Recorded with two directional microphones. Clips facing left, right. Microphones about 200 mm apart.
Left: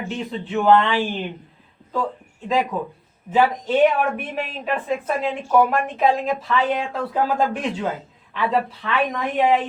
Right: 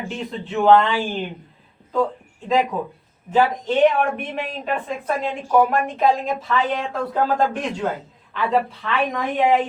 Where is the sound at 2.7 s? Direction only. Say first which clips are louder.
Even; centre (ahead or behind).